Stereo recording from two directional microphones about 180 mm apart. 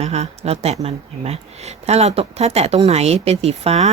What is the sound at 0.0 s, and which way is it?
Speech, 35° right (ahead or behind).